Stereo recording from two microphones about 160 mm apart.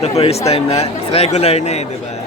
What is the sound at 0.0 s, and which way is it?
Speech, 40° left (ahead or behind).